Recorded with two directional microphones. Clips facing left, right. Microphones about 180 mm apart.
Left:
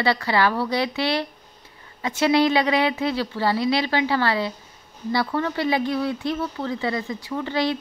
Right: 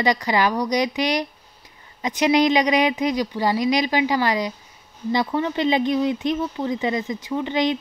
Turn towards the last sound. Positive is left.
turn(degrees=-20)  # may be behind; listen again after turning